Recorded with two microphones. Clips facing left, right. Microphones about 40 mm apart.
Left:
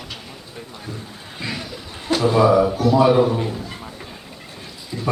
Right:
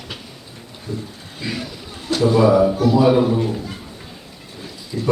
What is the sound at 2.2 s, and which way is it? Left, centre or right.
Speech, centre.